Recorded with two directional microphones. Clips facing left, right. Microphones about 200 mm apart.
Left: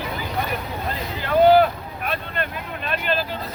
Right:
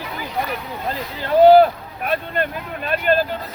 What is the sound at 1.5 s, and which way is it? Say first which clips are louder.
Vehicle: right 4 dB; 40° right (ahead or behind).